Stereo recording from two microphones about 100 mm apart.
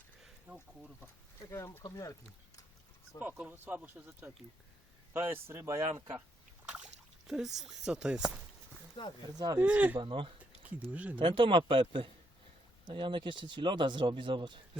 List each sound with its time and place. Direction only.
1.0 s speech: 30° left (ahead or behind)
3.2 s speech: 15° right (ahead or behind); by 5.8 s 30° right (ahead or behind)
6.7 s speech: 10° right (ahead or behind)
9.0 s speech: 55° left (ahead or behind)
9.3 s speech: 40° right (ahead or behind)
9.6 s speech: 15° right (ahead or behind)
10.0 s speech: 60° right (ahead or behind)
10.9 s speech: 15° right (ahead or behind)
11.2 s speech: 55° right (ahead or behind)